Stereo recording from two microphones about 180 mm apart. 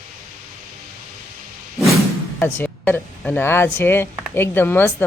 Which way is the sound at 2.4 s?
10° left (ahead or behind).